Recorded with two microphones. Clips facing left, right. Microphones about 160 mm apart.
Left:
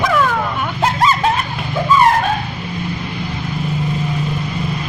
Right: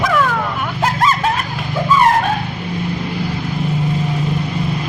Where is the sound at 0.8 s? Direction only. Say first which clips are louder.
Left 1 dB; centre (ahead or behind).